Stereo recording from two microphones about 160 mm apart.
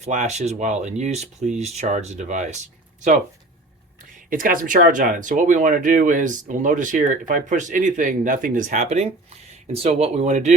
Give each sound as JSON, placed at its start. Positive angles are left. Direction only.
{"t": 0.0, "sound": "speech", "side_deg": -45}
{"t": 4.3, "sound": "speech", "side_deg": -55}